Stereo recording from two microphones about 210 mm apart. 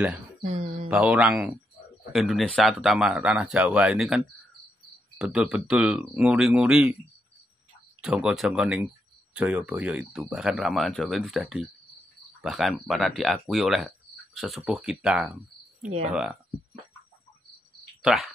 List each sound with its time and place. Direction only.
0.4 s a sound: 35° right (ahead or behind)
0.8 s speech: 5° right (ahead or behind)
5.2 s speech: 5° right (ahead or behind)
8.0 s speech: 5° right (ahead or behind)
18.0 s speech: centre (ahead or behind)